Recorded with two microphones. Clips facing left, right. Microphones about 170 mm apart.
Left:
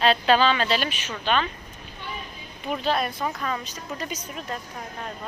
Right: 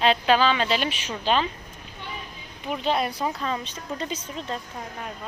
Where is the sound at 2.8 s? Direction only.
25° right (ahead or behind).